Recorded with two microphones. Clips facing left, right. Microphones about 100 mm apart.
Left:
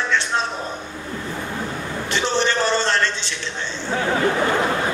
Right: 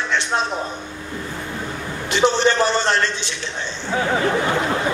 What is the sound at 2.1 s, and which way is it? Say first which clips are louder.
A man's voice: right 5 dB; 15° right (ahead or behind).